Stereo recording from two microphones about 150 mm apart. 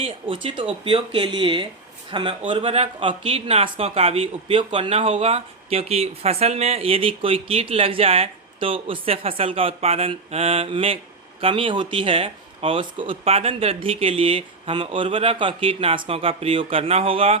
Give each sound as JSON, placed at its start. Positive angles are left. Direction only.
{"t": 0.0, "sound": "speech", "side_deg": -40}